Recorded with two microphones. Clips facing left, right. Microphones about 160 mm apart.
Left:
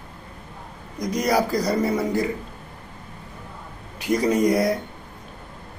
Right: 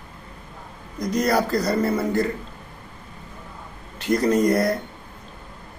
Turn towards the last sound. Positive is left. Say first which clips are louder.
# even
turn(degrees=10)  # may be behind; listen again after turning